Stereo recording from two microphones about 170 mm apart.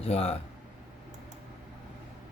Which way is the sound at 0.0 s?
35° left (ahead or behind).